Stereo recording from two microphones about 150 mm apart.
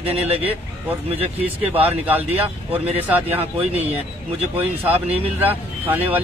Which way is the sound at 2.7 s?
45° right (ahead or behind).